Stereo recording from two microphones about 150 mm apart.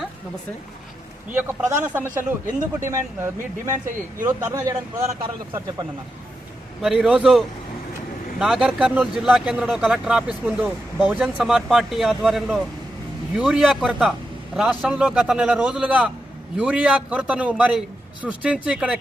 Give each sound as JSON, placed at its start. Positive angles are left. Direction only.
{"t": 1.3, "sound": "a man's voice", "side_deg": -10}
{"t": 6.8, "sound": "a man's voice", "side_deg": -5}